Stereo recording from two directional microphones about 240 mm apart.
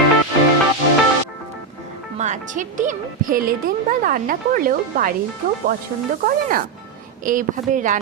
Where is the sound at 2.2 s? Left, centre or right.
Right.